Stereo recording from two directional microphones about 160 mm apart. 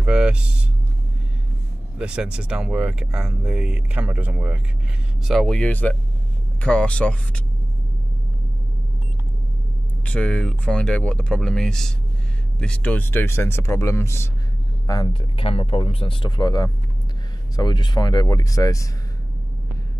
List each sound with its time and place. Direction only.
0.0 s vehicle: 5° right (ahead or behind)
2.0 s speech: 5° right (ahead or behind)
10.0 s speech: 10° left (ahead or behind); by 15.4 s 25° left (ahead or behind)
15.4 s speech: 35° left (ahead or behind); by 18.9 s 20° left (ahead or behind)